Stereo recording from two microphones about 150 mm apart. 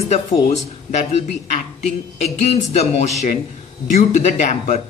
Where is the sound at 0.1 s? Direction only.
50° left (ahead or behind).